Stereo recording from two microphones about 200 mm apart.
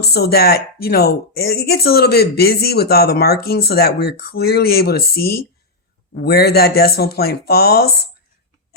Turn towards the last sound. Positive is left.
turn(degrees=50)  # may be behind; listen again after turning